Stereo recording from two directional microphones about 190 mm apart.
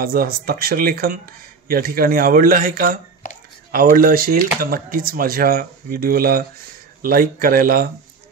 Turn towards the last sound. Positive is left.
turn(degrees=-50)  # may be behind; listen again after turning